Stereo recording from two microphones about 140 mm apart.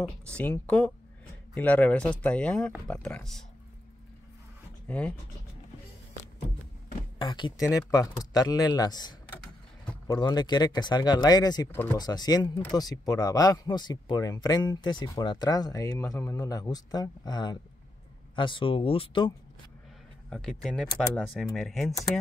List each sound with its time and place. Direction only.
0.0 s speech: 10° left (ahead or behind)
4.8 s speech: 10° left (ahead or behind)
7.2 s speech: 35° left (ahead or behind)
7.5 s speech: 25° left (ahead or behind)
11.7 s speech: 15° left (ahead or behind)
12.0 s speech: 30° left (ahead or behind)
20.2 s speech: 5° left (ahead or behind)